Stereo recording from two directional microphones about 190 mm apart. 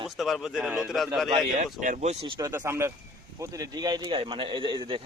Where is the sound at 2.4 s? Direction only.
15° right (ahead or behind).